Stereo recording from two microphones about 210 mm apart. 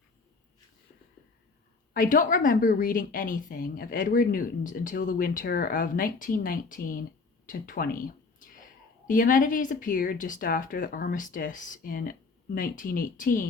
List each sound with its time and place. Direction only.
1.9 s a woman's voice: 40° left (ahead or behind)